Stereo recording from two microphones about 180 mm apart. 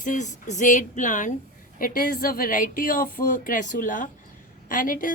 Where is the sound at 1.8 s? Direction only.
55° left (ahead or behind).